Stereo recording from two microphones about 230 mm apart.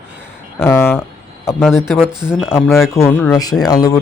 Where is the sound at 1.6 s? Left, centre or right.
Centre.